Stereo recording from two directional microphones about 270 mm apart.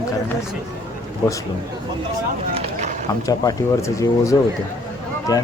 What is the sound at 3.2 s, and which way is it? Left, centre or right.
Speech, centre.